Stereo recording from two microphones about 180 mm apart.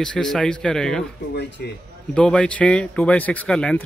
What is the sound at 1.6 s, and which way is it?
Speech, 65° left (ahead or behind).